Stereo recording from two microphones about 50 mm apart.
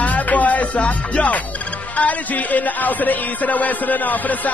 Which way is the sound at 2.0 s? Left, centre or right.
Left.